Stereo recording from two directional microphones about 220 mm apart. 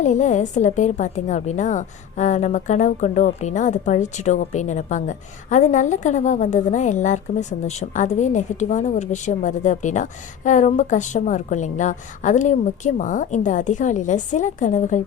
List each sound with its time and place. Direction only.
0.0 s a woman's voice: 35° left (ahead or behind)